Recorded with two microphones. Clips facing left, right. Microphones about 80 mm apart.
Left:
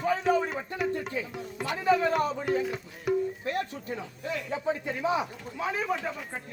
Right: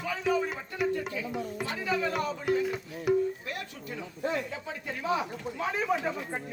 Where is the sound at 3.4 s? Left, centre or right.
Left.